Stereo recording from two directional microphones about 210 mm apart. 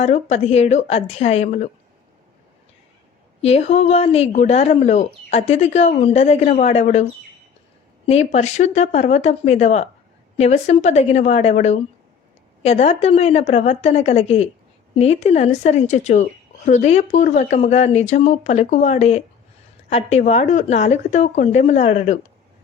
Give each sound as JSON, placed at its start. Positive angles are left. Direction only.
{"t": 0.0, "sound": "speech", "side_deg": 30}
{"t": 3.4, "sound": "speech", "side_deg": 30}
{"t": 8.0, "sound": "speech", "side_deg": 30}